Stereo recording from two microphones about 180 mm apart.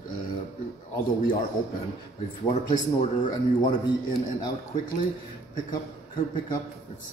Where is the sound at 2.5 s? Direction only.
40° left (ahead or behind).